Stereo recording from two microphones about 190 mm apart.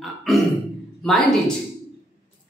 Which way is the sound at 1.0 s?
Centre (ahead or behind).